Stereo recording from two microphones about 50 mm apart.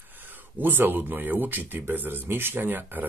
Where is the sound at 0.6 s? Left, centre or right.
Right.